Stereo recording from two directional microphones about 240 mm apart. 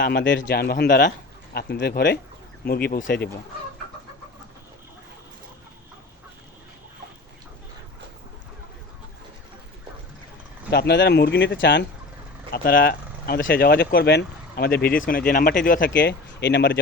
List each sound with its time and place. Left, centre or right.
0.0 s speech: left
10.7 s speech: left
12.5 s speech: left